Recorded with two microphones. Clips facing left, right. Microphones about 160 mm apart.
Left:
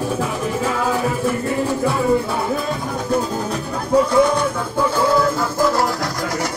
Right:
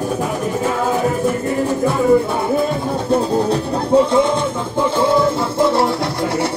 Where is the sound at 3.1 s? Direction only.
30° right (ahead or behind).